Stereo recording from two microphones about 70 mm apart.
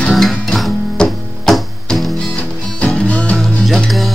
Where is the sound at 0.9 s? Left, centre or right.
Centre.